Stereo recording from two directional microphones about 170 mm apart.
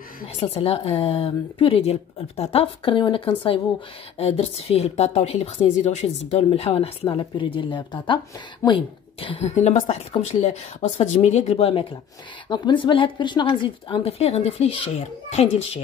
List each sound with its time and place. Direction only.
0.4 s a woman's voice: 35° left (ahead or behind)